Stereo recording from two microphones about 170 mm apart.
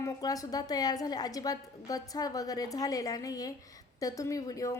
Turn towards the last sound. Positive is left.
turn(degrees=20)  # may be behind; listen again after turning